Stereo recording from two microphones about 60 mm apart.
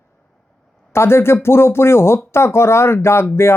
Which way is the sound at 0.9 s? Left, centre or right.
Left.